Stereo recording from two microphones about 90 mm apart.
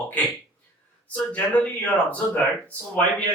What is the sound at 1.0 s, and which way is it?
Speech, 15° left (ahead or behind).